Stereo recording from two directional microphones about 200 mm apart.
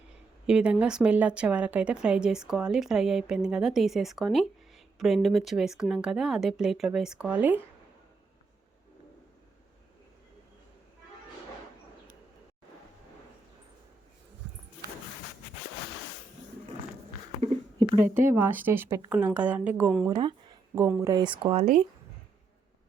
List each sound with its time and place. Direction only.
0.4 s a woman's voice: 5° right (ahead or behind)
17.4 s a sound: 20° right (ahead or behind)
18.0 s speech: 10° right (ahead or behind)
20.1 s speech: 25° right (ahead or behind)
20.7 s speech: 15° right (ahead or behind); by 21.8 s 35° right (ahead or behind)